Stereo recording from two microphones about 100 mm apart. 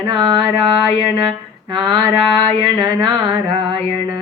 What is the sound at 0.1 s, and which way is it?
Female singing, 60° right (ahead or behind).